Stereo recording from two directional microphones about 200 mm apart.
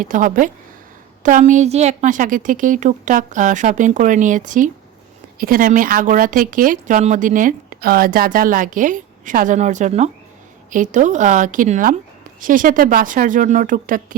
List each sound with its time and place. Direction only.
0.0 s a woman's voice: 40° right (ahead or behind)